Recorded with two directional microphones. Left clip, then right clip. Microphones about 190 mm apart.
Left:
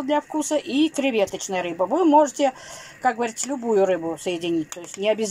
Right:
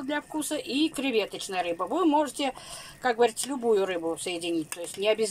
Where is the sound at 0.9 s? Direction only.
10° left (ahead or behind).